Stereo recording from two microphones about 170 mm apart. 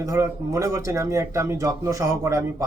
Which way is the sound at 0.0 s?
20° right (ahead or behind).